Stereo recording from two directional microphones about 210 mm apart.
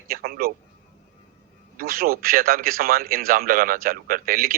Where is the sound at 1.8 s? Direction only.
45° right (ahead or behind).